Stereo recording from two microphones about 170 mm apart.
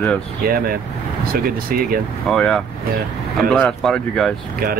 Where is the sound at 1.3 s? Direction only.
60° right (ahead or behind).